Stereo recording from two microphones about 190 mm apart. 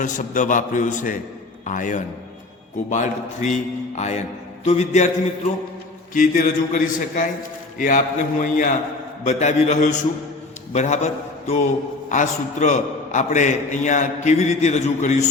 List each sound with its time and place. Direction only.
0.0 s a man's voice: 40° left (ahead or behind)
6.1 s a man's voice: 45° left (ahead or behind)